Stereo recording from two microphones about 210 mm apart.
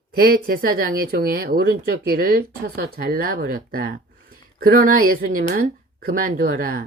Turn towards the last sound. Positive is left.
turn(degrees=-45)  # may be behind; listen again after turning